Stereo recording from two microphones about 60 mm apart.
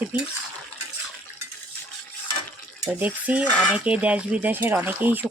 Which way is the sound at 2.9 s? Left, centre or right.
Right.